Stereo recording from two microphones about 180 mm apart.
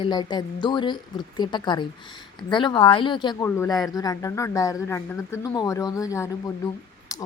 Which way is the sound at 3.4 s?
15° left (ahead or behind).